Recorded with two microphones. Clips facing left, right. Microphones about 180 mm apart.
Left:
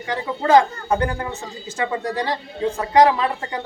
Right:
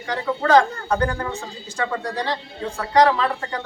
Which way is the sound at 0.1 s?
20° left (ahead or behind).